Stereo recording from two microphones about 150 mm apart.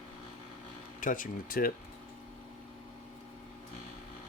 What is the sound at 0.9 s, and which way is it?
Speech, 65° left (ahead or behind).